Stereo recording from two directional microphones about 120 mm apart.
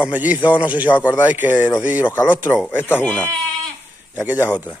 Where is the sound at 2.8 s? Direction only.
15° left (ahead or behind).